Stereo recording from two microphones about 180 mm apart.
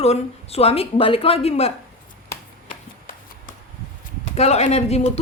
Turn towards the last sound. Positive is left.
turn(degrees=35)  # may be behind; listen again after turning